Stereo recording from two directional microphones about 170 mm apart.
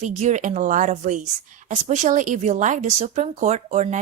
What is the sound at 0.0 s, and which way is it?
A woman's voice, 45° right (ahead or behind).